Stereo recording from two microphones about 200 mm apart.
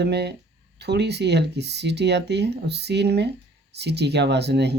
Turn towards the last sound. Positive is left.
turn(degrees=-55)  # may be behind; listen again after turning